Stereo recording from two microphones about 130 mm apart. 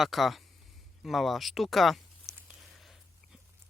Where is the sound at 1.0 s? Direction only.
Centre (ahead or behind).